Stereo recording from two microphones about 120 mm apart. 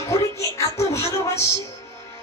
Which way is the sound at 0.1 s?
25° left (ahead or behind).